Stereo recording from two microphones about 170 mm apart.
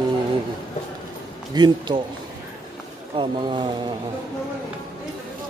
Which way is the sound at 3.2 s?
30° right (ahead or behind).